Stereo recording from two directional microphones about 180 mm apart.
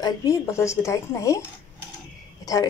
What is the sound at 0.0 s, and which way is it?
A woman's voice, 20° left (ahead or behind).